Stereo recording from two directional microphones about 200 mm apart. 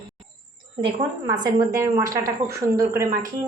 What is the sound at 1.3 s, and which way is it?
A woman's voice, 15° right (ahead or behind).